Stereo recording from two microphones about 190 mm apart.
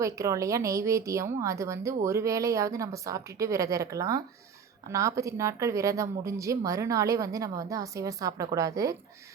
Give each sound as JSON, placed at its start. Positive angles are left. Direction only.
{"t": 0.0, "sound": "speech", "side_deg": -15}